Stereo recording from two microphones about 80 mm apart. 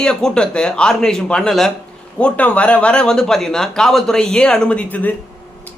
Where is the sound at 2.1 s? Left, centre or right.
Centre.